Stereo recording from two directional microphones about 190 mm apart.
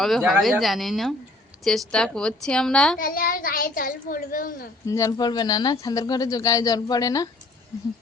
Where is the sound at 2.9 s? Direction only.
50° left (ahead or behind).